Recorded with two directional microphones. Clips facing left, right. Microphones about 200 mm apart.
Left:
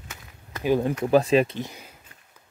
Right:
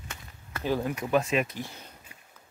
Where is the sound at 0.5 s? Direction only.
15° left (ahead or behind).